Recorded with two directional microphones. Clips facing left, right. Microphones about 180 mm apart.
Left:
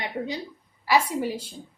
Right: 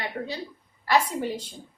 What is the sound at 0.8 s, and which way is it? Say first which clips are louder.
Speech: left 1 dB; 10° left (ahead or behind).